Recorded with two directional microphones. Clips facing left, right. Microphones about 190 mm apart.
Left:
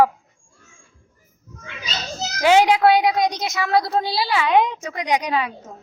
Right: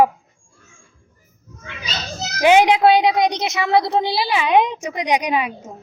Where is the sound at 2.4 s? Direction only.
20° right (ahead or behind).